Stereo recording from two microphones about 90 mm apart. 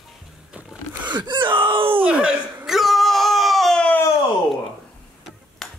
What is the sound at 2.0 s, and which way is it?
Speech, 10° right (ahead or behind).